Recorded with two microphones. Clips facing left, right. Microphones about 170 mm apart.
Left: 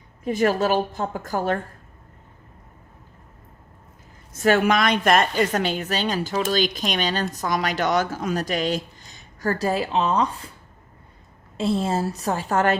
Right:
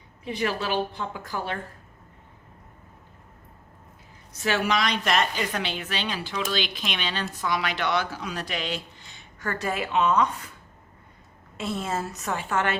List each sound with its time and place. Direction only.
0.3 s a woman's voice: 45° left (ahead or behind)
4.3 s a woman's voice: 50° left (ahead or behind); by 10.5 s 30° left (ahead or behind)
11.5 s a woman's voice: 30° left (ahead or behind)